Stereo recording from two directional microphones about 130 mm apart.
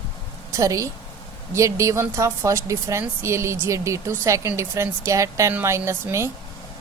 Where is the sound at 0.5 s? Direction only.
25° right (ahead or behind).